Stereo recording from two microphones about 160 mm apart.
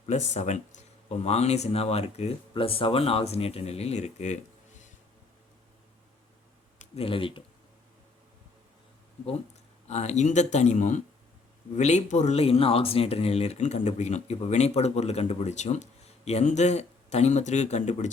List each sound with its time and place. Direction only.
0.0 s speech: 45° left (ahead or behind)
6.7 s speech: 40° left (ahead or behind)
9.8 s speech: 45° left (ahead or behind)